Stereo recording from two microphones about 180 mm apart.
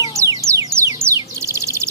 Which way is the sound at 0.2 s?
15° right (ahead or behind).